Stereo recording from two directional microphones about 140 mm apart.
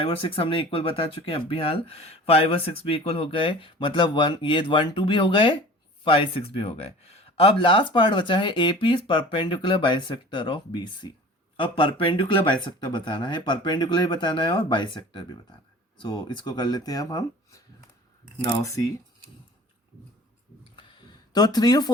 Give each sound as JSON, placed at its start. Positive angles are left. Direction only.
{"t": 0.0, "sound": "speech", "side_deg": 40}
{"t": 21.3, "sound": "speech", "side_deg": 30}